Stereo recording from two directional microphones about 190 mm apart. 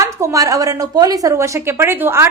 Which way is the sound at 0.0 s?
15° right (ahead or behind).